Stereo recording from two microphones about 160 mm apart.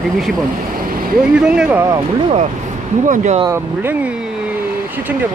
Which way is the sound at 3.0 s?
50° right (ahead or behind).